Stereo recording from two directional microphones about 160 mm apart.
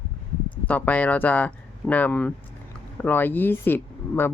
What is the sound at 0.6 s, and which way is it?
Speech, 10° left (ahead or behind).